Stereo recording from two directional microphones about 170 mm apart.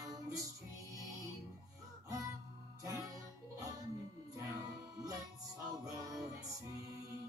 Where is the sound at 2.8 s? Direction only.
20° right (ahead or behind).